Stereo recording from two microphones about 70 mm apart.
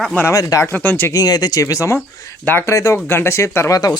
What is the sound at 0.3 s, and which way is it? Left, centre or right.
Speech, left.